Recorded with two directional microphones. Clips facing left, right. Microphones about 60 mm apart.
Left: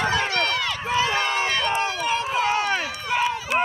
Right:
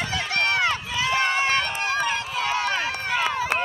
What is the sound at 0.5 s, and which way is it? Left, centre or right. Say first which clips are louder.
Run: right 3 dB; right.